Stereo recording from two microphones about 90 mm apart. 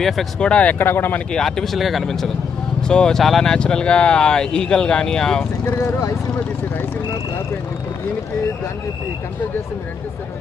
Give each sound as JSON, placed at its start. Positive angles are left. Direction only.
{"t": 0.0, "sound": "speech", "side_deg": 5}
{"t": 1.3, "sound": "speech", "side_deg": 5}
{"t": 5.8, "sound": "speech", "side_deg": 35}